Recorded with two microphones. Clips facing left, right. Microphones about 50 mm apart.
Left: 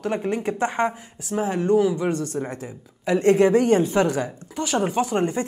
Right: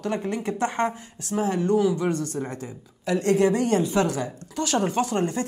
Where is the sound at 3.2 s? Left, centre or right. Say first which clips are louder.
Left 4 dB; left.